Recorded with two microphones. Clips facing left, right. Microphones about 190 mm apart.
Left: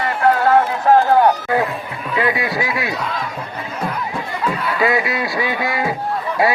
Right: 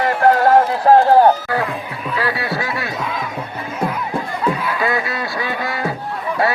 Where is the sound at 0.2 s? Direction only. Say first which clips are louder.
Right 1 dB; 40° right (ahead or behind).